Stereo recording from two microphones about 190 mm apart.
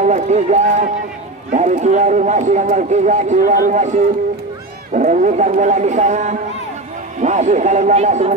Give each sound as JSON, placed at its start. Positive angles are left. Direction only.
{"t": 0.0, "sound": "speech", "side_deg": -40}
{"t": 4.9, "sound": "speech", "side_deg": -40}